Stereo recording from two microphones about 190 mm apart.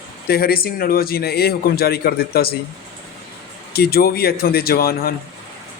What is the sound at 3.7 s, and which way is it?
A man's voice, 55° left (ahead or behind).